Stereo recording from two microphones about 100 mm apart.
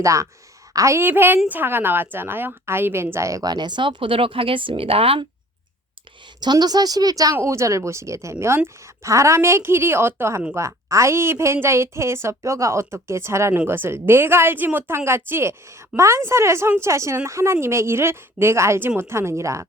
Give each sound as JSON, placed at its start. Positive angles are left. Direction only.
{"t": 0.0, "sound": "a woman's voice", "side_deg": -30}
{"t": 6.4, "sound": "a woman's voice", "side_deg": -45}